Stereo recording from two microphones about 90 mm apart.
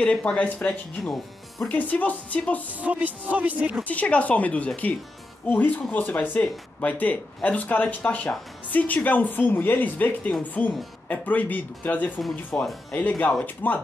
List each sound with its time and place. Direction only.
0.0 s speech: 10° left (ahead or behind)
1.7 s speech: 15° left (ahead or behind)
2.8 s speech: 15° right (ahead or behind)
3.8 s speech: 15° left (ahead or behind)